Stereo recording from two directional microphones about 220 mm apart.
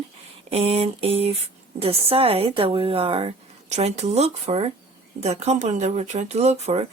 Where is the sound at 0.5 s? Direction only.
25° right (ahead or behind).